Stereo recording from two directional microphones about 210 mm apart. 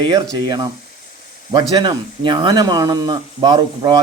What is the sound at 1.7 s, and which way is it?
Speech, 20° right (ahead or behind).